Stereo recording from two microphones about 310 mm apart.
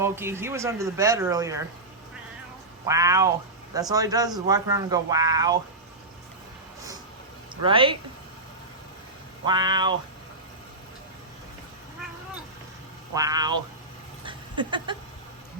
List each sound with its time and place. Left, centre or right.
0.0 s a man's voice: centre
2.8 s a man's voice: centre
7.6 s a man's voice: centre
9.5 s a man's voice: centre
13.1 s a man's voice: centre
14.3 s a sound: centre